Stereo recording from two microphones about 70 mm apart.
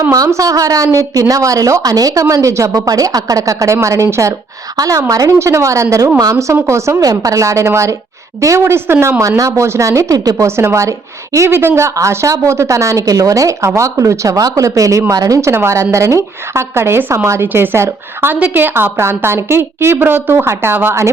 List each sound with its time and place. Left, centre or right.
0.3 s a woman's voice: right
2.3 s speech: right
4.8 s a woman's voice: right
5.4 s speech: right
8.6 s a woman's voice: right
11.9 s a woman's voice: right
18.3 s a woman's voice: right